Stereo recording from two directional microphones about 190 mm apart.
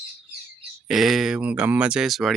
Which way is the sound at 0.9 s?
Centre (ahead or behind).